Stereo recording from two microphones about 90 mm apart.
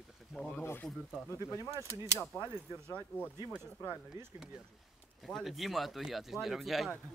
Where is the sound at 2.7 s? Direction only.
15° left (ahead or behind).